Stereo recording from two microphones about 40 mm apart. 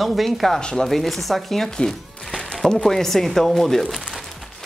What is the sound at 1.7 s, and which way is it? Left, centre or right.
A woman's voice, centre.